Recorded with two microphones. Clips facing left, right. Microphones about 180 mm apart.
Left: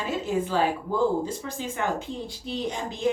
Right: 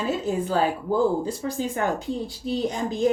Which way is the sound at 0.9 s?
40° right (ahead or behind).